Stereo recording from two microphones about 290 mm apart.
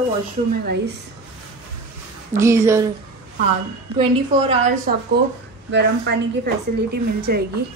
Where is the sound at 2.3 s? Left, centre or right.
Centre.